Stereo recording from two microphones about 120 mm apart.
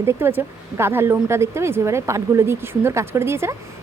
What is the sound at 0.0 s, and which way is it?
A woman's voice, 20° right (ahead or behind).